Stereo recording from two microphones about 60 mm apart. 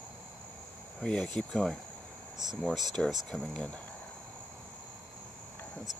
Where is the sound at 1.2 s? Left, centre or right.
Centre.